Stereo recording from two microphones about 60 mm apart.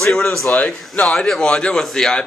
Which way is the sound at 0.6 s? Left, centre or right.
Left.